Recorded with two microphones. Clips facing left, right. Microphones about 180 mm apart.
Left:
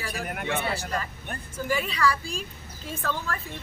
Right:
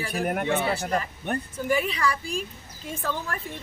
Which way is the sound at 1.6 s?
20° right (ahead or behind).